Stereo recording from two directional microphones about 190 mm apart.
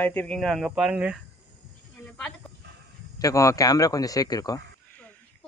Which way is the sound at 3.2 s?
15° left (ahead or behind).